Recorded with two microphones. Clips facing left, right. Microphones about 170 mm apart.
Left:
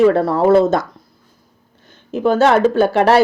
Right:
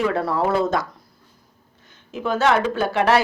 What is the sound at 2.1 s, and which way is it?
Speech, 35° left (ahead or behind).